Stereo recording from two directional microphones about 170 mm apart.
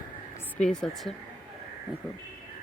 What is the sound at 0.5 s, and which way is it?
Speech, 5° left (ahead or behind).